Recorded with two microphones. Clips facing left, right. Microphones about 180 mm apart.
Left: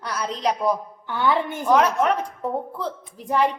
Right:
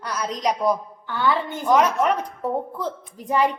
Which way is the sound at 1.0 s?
20° left (ahead or behind).